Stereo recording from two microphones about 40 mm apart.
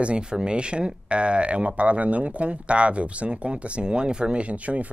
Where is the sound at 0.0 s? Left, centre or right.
Right.